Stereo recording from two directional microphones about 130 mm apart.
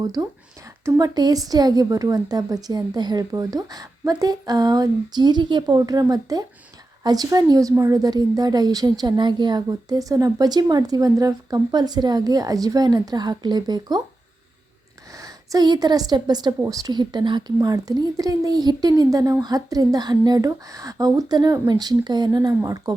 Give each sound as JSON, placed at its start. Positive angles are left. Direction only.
{"t": 0.0, "sound": "a woman's voice", "side_deg": -25}
{"t": 15.1, "sound": "a woman's voice", "side_deg": -30}